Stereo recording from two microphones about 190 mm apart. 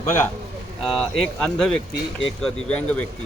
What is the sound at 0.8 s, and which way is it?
Speech, centre (ahead or behind).